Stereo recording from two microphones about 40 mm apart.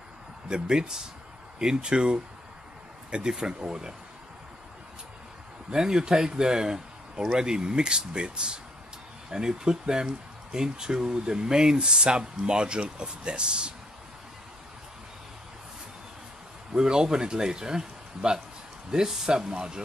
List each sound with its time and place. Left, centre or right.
0.5 s speech: centre
5.7 s speech: centre
16.7 s speech: centre